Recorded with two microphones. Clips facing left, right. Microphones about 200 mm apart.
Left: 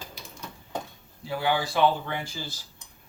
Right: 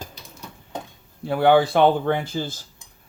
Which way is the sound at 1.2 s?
60° right (ahead or behind).